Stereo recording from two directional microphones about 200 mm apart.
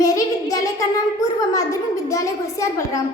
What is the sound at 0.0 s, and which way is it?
Child singing, 15° left (ahead or behind).